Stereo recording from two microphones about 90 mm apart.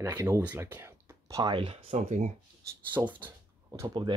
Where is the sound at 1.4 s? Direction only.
70° right (ahead or behind).